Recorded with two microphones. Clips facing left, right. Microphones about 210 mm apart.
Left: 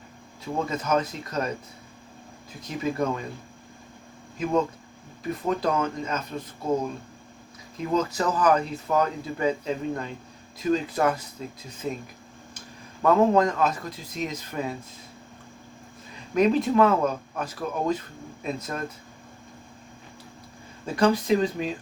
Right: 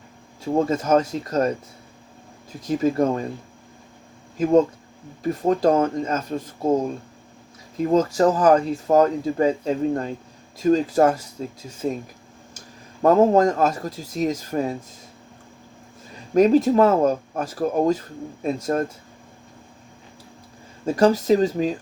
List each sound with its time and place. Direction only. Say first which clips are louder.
0.4 s speech: right 7 dB; 40° right (ahead or behind)
2.6 s speech: right 7 dB; 45° right (ahead or behind)
5.3 s speech: right 7 dB; 45° right (ahead or behind)
7.8 s speech: right 7 dB; 45° right (ahead or behind)
16.3 s speech: right 6 dB; 40° right (ahead or behind)
20.8 s speech: right 5 dB; 40° right (ahead or behind)